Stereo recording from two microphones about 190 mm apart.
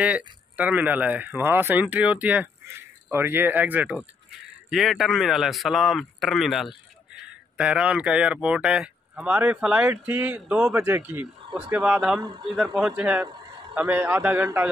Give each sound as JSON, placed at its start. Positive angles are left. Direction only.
{"t": 0.0, "sound": "speech", "side_deg": -5}
{"t": 12.2, "sound": "a man's voice", "side_deg": -25}
{"t": 12.7, "sound": "speech", "side_deg": -5}